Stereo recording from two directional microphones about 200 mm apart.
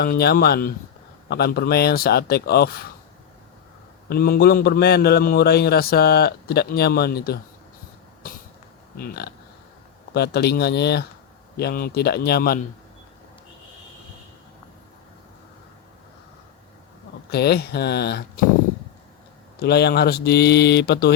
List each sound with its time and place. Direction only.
0.0 s a man's voice: 50° left (ahead or behind)
4.1 s a man's voice: 50° left (ahead or behind)
9.0 s a man's voice: 50° left (ahead or behind)
17.3 s speech: 55° left (ahead or behind)
19.6 s speech: 55° left (ahead or behind)